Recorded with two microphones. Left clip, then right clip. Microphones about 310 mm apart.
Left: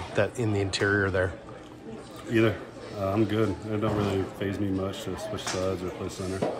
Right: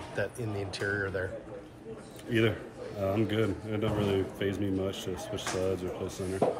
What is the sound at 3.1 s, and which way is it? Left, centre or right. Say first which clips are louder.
Speech: left 6 dB; centre.